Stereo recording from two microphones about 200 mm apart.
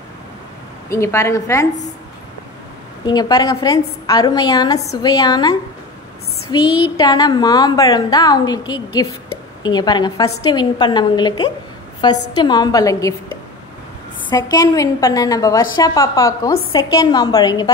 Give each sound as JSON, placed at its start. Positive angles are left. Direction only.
{"t": 0.8, "sound": "a woman's voice", "side_deg": 15}
{"t": 3.1, "sound": "a woman's voice", "side_deg": 20}
{"t": 14.3, "sound": "a woman's voice", "side_deg": 20}